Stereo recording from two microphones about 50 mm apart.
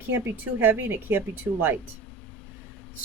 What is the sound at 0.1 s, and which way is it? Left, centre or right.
A woman's voice, right.